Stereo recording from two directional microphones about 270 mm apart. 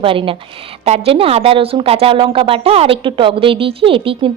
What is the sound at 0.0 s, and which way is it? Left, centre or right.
A woman's voice, centre.